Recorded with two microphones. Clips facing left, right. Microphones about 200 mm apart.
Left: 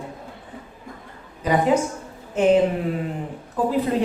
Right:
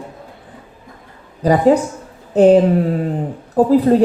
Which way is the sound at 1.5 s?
40° right (ahead or behind).